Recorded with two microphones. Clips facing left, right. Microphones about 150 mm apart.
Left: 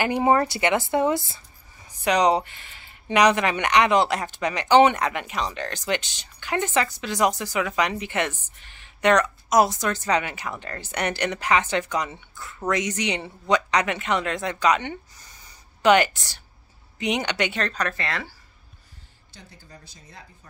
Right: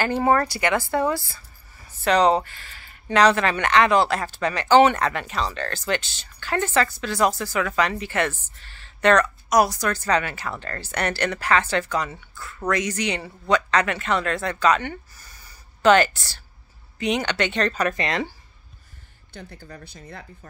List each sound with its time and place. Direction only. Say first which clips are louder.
0.0 s a woman's voice: even; 15° left (ahead or behind)
17.6 s speech: right 4 dB; centre (ahead or behind)
17.8 s speech: right 5 dB; 20° right (ahead or behind)
19.3 s speech: right 8 dB; 60° right (ahead or behind)